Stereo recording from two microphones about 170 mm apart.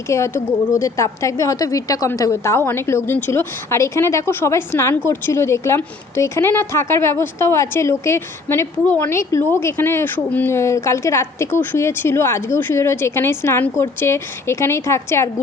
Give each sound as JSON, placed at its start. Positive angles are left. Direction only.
{"t": 0.1, "sound": "a woman's voice", "side_deg": 15}